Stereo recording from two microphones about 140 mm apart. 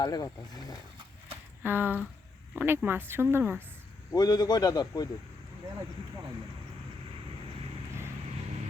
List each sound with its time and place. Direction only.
0.0 s a man's voice: 30° left (ahead or behind)
1.6 s speech: 15° right (ahead or behind)
4.1 s a man's voice: 30° left (ahead or behind)